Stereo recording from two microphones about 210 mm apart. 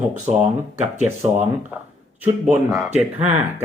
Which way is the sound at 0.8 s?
30° right (ahead or behind).